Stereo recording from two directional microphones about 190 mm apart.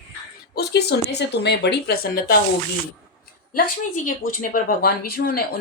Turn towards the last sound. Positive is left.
turn(degrees=50)  # may be behind; listen again after turning